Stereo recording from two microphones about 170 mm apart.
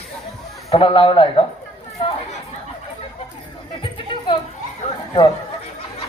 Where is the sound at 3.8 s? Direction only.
30° left (ahead or behind).